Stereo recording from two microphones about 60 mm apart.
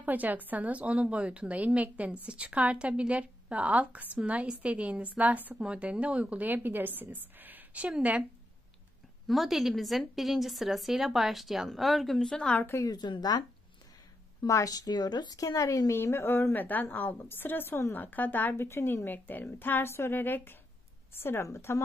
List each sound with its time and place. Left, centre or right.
0.0 s speech: right
9.3 s a woman's voice: centre
12.3 s a woman's voice: centre
12.8 s a woman's voice: left
14.4 s a woman's voice: left
16.0 s a woman's voice: left
18.6 s a woman's voice: left
19.0 s a woman's voice: left